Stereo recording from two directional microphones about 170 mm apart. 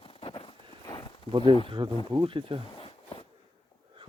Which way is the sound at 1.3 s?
30° right (ahead or behind).